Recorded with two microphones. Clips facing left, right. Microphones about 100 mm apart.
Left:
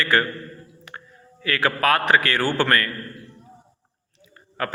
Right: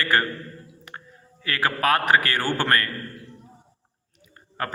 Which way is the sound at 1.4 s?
30° right (ahead or behind).